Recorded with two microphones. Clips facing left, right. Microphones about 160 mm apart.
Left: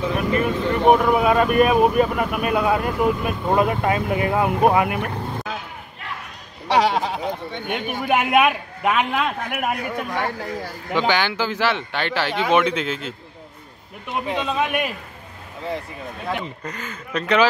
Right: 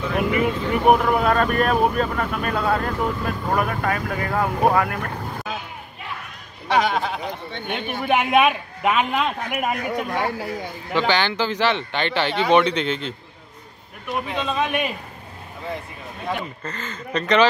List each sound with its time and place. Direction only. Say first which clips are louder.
0.3 s speech: left 1 dB; 15° right (ahead or behind)
0.8 s speech: left 1 dB; centre (ahead or behind); by 5.1 s 15° left (ahead or behind)
6.7 s speech: left 2 dB; 30° left (ahead or behind)
7.5 s a man's voice: left 1 dB; 10° left (ahead or behind)
9.8 s speech: right 1 dB; 10° right (ahead or behind)
10.9 s speech: even; 10° left (ahead or behind)
14.0 s speech: left 1 dB; 25° left (ahead or behind)
14.4 s speech: even; 10° left (ahead or behind)
16.3 s speech: left 1 dB; 15° left (ahead or behind)